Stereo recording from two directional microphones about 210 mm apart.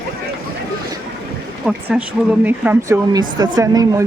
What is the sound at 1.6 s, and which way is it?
Speech, 5° right (ahead or behind).